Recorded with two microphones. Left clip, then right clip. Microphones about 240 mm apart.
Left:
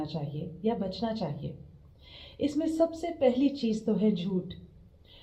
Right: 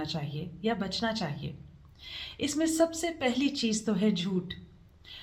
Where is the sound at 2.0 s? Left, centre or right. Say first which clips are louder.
Left 1 dB; right.